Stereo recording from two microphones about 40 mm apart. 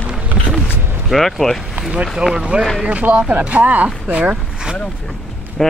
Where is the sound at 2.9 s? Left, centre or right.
Right.